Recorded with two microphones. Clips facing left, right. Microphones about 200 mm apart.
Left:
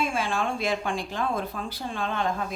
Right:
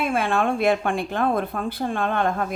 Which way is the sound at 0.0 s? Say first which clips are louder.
Right 5 dB; 60° right (ahead or behind).